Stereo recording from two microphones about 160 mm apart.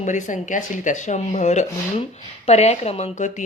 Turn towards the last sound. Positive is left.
turn(degrees=50)  # may be behind; listen again after turning